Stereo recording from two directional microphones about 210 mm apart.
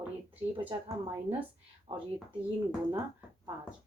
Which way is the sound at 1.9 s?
25° right (ahead or behind).